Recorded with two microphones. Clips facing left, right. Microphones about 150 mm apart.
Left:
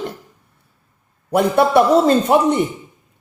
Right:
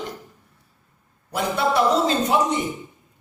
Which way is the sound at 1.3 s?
60° left (ahead or behind).